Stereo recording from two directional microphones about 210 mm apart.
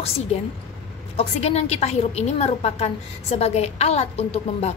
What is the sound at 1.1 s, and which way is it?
A woman's voice, 30° left (ahead or behind).